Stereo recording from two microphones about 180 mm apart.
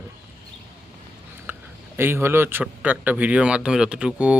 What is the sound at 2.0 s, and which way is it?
Speech, 15° right (ahead or behind).